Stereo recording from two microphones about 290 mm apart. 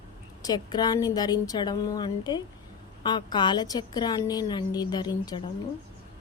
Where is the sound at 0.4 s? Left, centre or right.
Centre.